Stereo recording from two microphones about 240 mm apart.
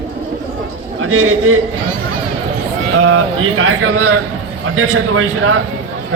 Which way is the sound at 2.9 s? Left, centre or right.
Right.